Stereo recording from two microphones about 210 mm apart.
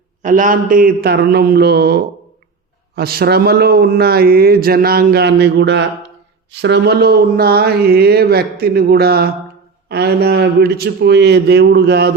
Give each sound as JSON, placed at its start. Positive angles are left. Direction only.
{"t": 0.2, "sound": "a man's voice", "side_deg": -40}